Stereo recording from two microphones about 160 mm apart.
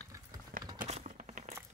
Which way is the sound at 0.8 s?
45° right (ahead or behind).